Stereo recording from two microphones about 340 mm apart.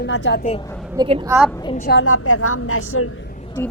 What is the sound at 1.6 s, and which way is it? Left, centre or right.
A woman's voice, left.